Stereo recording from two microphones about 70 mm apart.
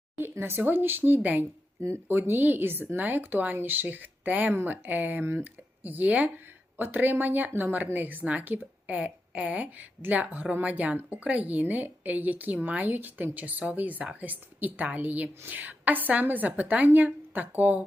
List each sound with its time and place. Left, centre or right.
0.2 s a woman's voice: right